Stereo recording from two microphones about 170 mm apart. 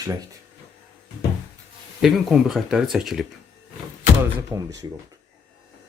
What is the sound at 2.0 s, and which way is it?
Speech, centre (ahead or behind).